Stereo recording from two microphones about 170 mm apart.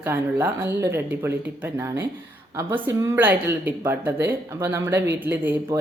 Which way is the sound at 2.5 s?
15° right (ahead or behind).